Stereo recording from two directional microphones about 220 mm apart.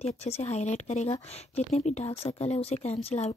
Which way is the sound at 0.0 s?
30° left (ahead or behind).